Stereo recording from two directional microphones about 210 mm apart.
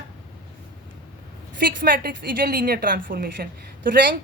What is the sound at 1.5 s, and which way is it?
A woman's voice, 45° right (ahead or behind).